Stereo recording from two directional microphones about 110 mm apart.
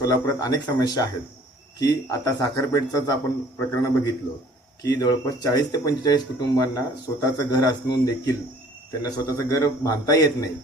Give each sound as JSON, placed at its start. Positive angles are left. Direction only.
{"t": 0.0, "sound": "a man's voice", "side_deg": 30}